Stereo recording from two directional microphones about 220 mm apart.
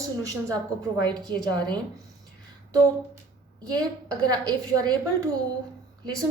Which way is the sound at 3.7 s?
15° right (ahead or behind).